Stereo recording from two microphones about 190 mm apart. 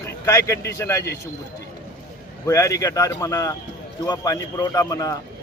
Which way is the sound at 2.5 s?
15° left (ahead or behind).